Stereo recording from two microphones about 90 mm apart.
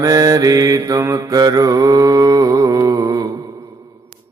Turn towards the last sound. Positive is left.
turn(degrees=-40)  # may be behind; listen again after turning